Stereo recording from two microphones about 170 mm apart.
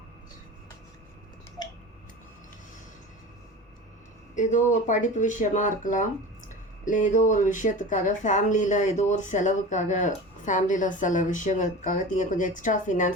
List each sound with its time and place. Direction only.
1.6 s tick-tock: 25° left (ahead or behind)
4.4 s speech: 45° left (ahead or behind)